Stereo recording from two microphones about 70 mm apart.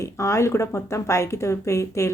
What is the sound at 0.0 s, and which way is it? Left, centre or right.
A woman's voice, left.